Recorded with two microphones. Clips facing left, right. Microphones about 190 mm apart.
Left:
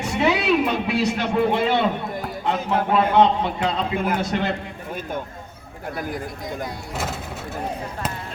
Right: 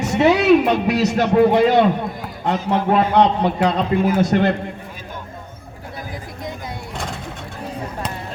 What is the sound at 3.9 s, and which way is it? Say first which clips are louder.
Speech: right 6 dB; 50° right (ahead or behind).